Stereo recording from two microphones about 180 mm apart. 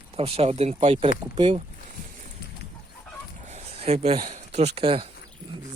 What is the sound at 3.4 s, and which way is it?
Speech, 35° right (ahead or behind).